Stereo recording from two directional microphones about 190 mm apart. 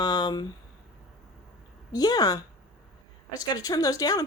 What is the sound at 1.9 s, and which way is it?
A woman's voice, 20° left (ahead or behind).